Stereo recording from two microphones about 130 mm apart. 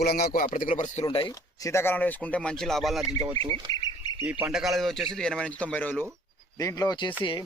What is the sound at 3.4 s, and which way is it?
Speech, 40° right (ahead or behind).